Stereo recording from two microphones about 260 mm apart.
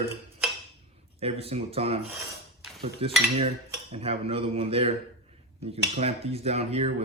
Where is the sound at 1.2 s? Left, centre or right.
Right.